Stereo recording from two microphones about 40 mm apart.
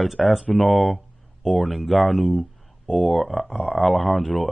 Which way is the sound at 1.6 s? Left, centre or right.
Centre.